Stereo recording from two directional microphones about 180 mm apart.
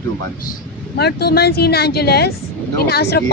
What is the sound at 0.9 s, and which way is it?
A woman's voice, 65° left (ahead or behind).